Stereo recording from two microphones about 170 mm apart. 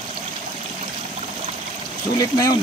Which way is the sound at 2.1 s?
20° left (ahead or behind).